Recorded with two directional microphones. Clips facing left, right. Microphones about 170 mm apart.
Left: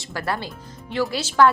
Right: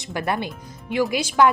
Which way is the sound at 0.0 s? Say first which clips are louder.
Right 2 dB; 20° right (ahead or behind).